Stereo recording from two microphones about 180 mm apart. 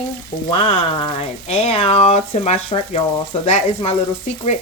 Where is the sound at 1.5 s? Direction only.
35° left (ahead or behind).